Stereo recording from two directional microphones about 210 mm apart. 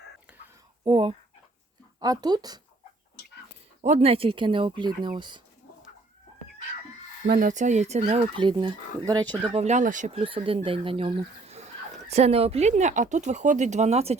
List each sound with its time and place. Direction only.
0.9 s speech: 25° right (ahead or behind)
3.8 s speech: 30° right (ahead or behind)
7.3 s speech: 40° right (ahead or behind); by 9.2 s 20° right (ahead or behind)
9.2 s speech: 5° left (ahead or behind)
9.5 s speech: 30° right (ahead or behind)